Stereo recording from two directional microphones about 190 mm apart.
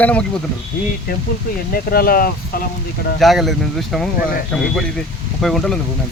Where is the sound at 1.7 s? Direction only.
50° left (ahead or behind).